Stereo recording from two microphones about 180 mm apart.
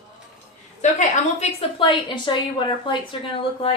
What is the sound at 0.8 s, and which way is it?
A woman's voice, 40° left (ahead or behind).